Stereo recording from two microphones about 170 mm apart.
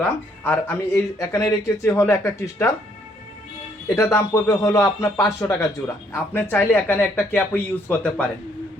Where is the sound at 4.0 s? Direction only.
15° left (ahead or behind).